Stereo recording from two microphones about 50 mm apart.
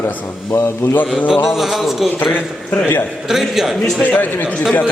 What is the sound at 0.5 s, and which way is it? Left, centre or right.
Speech, left.